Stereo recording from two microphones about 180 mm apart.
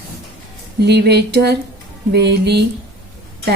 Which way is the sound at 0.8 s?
65° right (ahead or behind).